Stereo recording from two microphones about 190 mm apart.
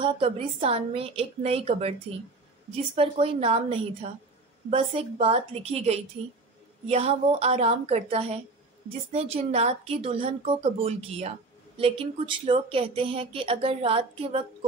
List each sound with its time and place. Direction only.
0.0 s a woman's voice: 30° right (ahead or behind)